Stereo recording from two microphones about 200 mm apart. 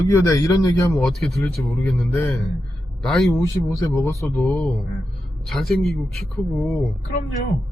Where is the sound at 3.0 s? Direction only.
Centre (ahead or behind).